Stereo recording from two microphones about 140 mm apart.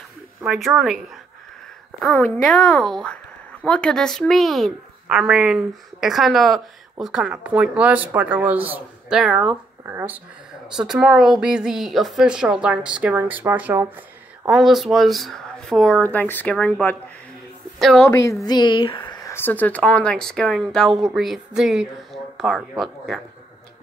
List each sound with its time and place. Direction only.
0.4 s speech: centre (ahead or behind)
2.1 s a woman's voice: 15° left (ahead or behind); by 10.2 s 15° right (ahead or behind)
10.7 s a woman's voice: 5° right (ahead or behind)
14.5 s a woman's voice: centre (ahead or behind)
18.0 s speech: 20° left (ahead or behind)
18.4 s speech: 30° left (ahead or behind)
19.3 s speech: 15° left (ahead or behind)